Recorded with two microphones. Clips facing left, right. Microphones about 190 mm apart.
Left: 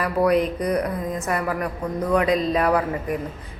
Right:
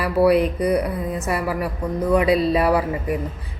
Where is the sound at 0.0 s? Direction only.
10° right (ahead or behind).